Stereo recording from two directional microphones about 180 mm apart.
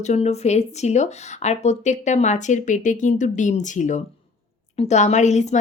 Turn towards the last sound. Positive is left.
turn(degrees=40)  # may be behind; listen again after turning